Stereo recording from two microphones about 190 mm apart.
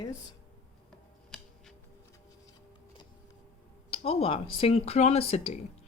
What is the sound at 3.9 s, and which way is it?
Speech, 30° left (ahead or behind).